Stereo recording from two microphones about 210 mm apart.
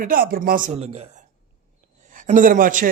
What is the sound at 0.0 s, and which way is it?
A man's voice, 45° right (ahead or behind).